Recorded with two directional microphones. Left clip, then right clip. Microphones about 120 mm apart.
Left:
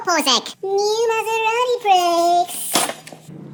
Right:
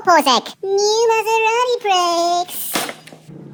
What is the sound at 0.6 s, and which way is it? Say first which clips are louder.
Child singing: right 3 dB; 55° right (ahead or behind).